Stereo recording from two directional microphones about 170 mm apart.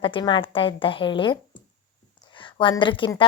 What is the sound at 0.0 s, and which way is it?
A woman's voice, 30° left (ahead or behind).